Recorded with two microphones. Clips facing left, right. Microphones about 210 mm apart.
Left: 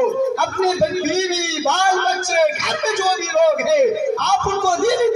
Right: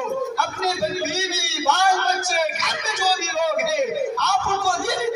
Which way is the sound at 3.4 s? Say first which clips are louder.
Left 9 dB; 55° left (ahead or behind).